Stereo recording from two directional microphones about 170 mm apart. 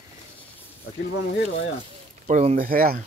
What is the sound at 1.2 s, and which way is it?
Speech, 90° left.